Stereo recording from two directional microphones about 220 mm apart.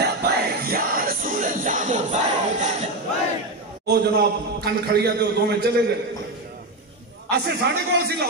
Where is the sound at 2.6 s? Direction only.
30° right (ahead or behind).